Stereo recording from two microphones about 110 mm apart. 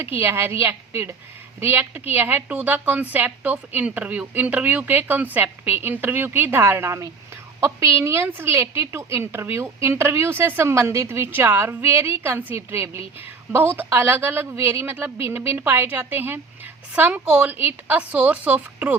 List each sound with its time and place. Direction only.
0.0 s a woman's voice: 20° right (ahead or behind)